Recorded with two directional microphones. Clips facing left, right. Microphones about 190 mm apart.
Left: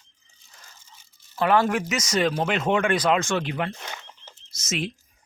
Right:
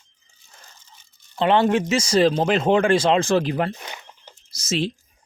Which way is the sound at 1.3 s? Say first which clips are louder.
Right 3 dB; 25° right (ahead or behind).